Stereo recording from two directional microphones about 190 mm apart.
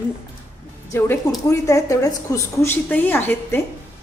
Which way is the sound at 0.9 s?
10° left (ahead or behind).